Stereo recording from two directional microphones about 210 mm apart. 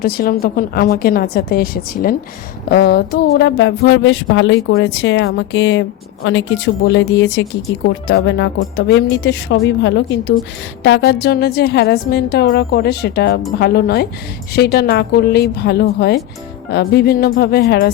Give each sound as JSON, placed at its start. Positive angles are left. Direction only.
{"t": 0.0, "sound": "a woman's voice", "side_deg": 45}
{"t": 2.6, "sound": "a sound", "side_deg": 50}
{"t": 10.8, "sound": "a woman's voice", "side_deg": 55}